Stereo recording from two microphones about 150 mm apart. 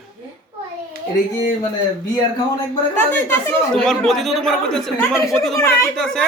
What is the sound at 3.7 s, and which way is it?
A woman's voice, 5° left (ahead or behind).